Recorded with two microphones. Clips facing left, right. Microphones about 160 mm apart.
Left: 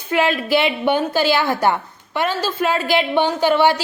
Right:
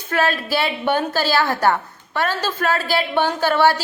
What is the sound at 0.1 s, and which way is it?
A woman's voice, 15° left (ahead or behind).